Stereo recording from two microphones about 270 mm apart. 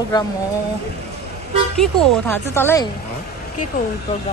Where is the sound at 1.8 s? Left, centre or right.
Centre.